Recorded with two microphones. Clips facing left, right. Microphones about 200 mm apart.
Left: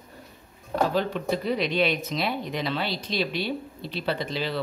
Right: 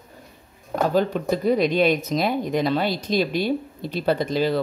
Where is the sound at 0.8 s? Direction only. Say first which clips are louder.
Right 7 dB; 45° right (ahead or behind).